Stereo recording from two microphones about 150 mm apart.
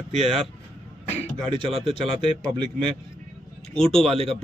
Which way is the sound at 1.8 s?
35° right (ahead or behind).